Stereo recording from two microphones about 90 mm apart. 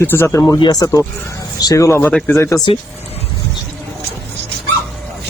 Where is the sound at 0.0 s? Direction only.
25° left (ahead or behind).